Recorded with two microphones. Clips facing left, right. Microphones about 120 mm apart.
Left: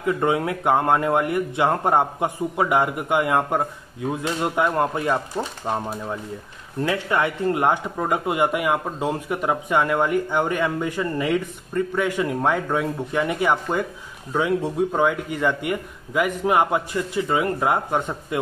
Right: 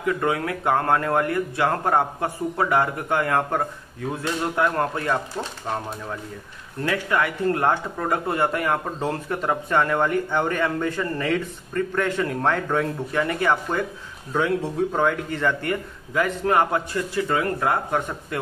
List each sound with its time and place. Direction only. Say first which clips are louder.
0.0 s speech: left 2 dB; 25° left (ahead or behind)